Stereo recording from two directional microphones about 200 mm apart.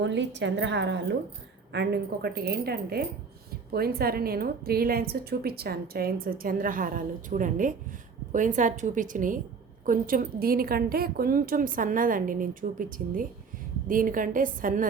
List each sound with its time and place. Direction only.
0.0 s a woman's voice: 60° right (ahead or behind); by 14.8 s 40° right (ahead or behind)